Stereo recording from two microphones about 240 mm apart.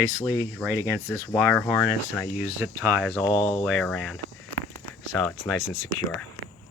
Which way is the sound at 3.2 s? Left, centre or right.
Centre.